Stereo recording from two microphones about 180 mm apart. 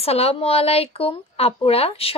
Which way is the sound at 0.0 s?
35° left (ahead or behind).